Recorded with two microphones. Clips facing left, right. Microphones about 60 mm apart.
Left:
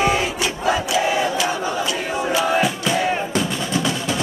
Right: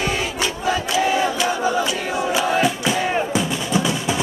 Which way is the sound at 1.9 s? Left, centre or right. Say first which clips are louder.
Even; centre.